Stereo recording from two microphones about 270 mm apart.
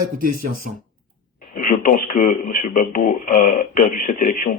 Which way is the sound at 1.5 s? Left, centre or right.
Left.